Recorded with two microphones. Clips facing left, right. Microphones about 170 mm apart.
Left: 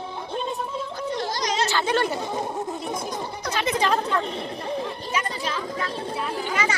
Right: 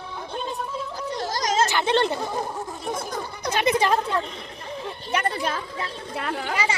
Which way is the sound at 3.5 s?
10° right (ahead or behind).